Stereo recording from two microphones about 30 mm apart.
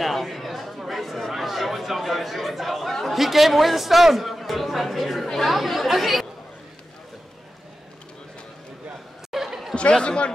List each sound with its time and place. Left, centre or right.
0.0 s chatter: centre
1.3 s a man's voice: centre
9.3 s chatter: centre
9.7 s chatter: centre
10.0 s speech: left